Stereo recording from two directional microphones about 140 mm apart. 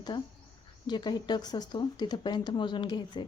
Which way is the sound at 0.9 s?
30° left (ahead or behind).